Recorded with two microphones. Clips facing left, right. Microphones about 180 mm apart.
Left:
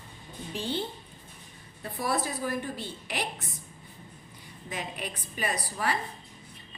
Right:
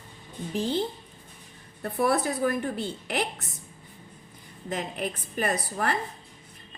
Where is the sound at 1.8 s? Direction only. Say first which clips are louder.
Right 6 dB; 60° right (ahead or behind).